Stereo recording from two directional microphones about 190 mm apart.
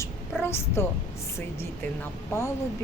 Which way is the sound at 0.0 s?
10° left (ahead or behind).